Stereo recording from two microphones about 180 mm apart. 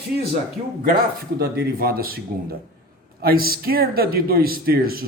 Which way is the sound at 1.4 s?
60° right (ahead or behind).